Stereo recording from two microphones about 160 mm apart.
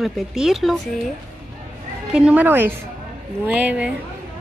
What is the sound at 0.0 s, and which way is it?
Speech, centre (ahead or behind).